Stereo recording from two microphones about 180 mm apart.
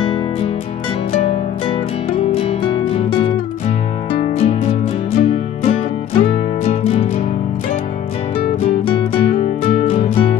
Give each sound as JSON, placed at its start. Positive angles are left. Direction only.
{"t": 1.2, "sound": "music", "side_deg": 30}
{"t": 4.4, "sound": "music", "side_deg": 35}
{"t": 8.8, "sound": "music", "side_deg": 30}